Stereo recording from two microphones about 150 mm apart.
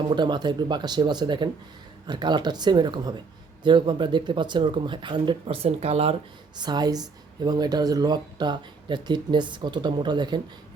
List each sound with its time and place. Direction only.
0.1 s speech: 30° right (ahead or behind)
6.6 s speech: 30° right (ahead or behind)